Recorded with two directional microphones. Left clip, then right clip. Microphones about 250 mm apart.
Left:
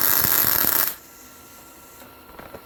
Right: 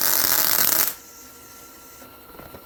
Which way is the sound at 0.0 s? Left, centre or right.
Centre.